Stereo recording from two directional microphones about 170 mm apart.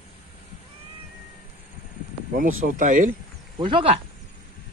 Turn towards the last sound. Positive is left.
turn(degrees=-35)  # may be behind; listen again after turning